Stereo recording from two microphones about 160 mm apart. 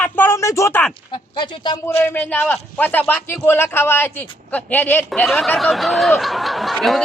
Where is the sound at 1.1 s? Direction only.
30° left (ahead or behind).